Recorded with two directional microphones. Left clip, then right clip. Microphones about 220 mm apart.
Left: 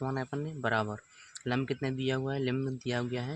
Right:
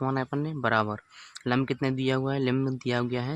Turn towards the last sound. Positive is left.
turn(degrees=-35)  # may be behind; listen again after turning